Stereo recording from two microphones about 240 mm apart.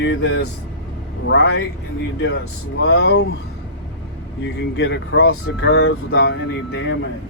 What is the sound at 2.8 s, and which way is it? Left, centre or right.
Speech, left.